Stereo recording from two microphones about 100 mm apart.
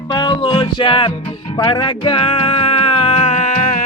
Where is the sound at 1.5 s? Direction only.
50° left (ahead or behind); by 3.6 s 90° left.